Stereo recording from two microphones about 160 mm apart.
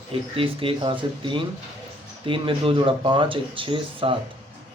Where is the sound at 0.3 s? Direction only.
35° right (ahead or behind).